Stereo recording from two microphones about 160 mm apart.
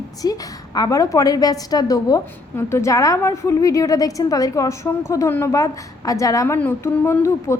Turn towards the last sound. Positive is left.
turn(degrees=15)  # may be behind; listen again after turning